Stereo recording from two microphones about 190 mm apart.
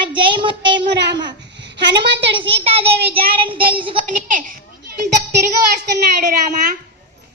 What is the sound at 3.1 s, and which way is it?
Child singing, 25° right (ahead or behind).